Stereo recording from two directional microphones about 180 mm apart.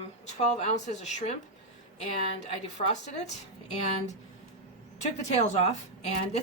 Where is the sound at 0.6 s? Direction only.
40° left (ahead or behind).